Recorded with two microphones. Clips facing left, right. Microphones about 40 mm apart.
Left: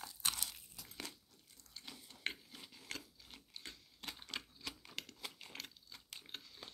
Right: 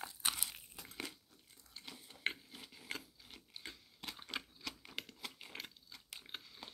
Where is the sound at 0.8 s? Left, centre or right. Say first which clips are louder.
Right 5 dB; right.